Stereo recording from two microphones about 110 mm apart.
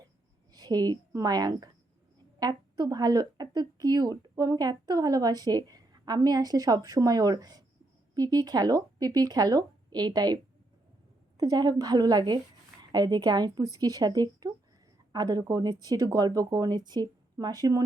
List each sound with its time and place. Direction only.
0.5 s a woman's voice: 35° right (ahead or behind)